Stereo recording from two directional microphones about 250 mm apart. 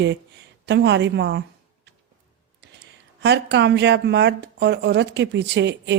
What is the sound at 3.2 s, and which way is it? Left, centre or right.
Speech, right.